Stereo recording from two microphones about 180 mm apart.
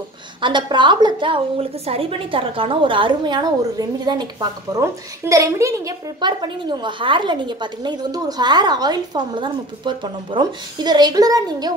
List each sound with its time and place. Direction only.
0.4 s a woman's voice: 25° right (ahead or behind)